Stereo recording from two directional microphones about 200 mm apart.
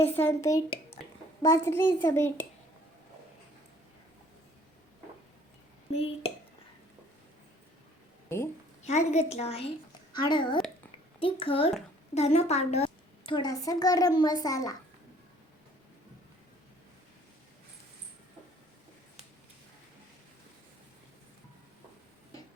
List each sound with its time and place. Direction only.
0.1 s a child's voice: 10° left (ahead or behind)
5.9 s a woman's voice: 30° left (ahead or behind)
8.8 s a woman's voice: 35° left (ahead or behind); by 14.8 s 15° left (ahead or behind)